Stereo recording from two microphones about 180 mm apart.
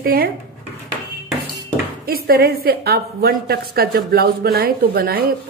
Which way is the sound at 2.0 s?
55° right (ahead or behind).